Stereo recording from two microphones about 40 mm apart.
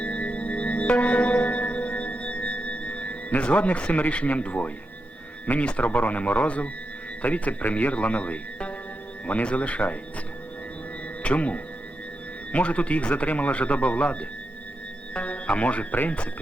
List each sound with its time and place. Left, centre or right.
0.0 s music: left
4.1 s speech: left
11.2 s speech: left